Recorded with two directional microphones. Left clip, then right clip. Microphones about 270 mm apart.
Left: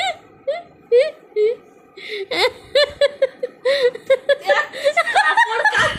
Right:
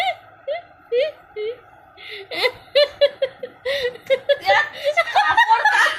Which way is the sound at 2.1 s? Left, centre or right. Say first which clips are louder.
Left 3 dB; left.